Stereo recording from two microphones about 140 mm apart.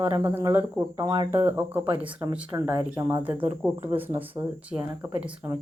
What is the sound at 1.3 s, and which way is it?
Speech, 15° right (ahead or behind).